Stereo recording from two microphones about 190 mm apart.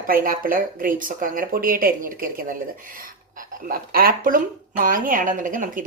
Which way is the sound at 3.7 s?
50° right (ahead or behind).